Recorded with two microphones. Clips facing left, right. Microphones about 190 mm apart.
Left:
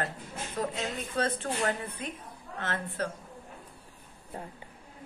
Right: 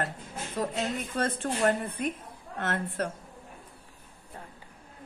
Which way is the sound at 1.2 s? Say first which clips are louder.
Right 2 dB; 50° right (ahead or behind).